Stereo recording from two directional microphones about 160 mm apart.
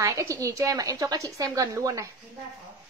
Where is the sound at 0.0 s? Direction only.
20° right (ahead or behind).